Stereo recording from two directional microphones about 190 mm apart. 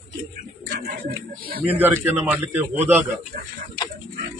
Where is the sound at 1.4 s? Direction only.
55° right (ahead or behind).